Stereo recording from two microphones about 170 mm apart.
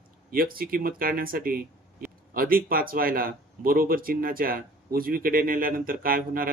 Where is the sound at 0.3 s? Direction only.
60° right (ahead or behind).